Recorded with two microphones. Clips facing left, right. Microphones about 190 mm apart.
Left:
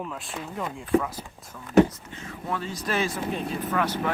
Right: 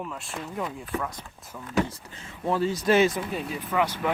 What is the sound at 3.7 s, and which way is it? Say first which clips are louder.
Speech: right 2 dB; 15° right (ahead or behind).